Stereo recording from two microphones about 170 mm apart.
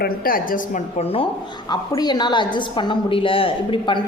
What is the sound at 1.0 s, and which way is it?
A woman's voice, 35° left (ahead or behind).